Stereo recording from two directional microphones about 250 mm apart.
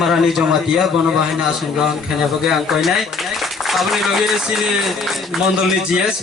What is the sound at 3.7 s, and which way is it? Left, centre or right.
Speech, centre.